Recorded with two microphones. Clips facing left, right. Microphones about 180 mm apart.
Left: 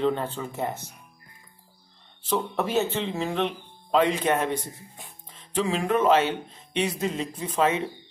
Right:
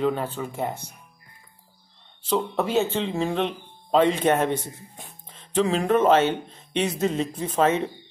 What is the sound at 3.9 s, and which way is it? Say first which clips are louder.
A man's voice: right 3 dB; 25° right (ahead or behind).